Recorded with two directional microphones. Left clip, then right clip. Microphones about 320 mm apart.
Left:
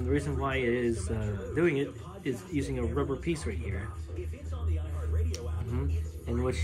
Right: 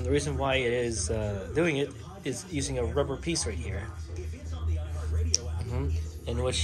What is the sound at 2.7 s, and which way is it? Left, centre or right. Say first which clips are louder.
A man's voice: right 5 dB; centre.